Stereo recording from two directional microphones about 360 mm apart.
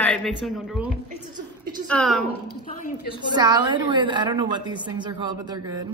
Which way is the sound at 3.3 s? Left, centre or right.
Centre.